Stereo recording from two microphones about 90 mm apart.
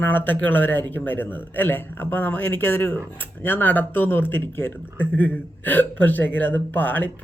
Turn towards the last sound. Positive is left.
turn(degrees=20)  # may be behind; listen again after turning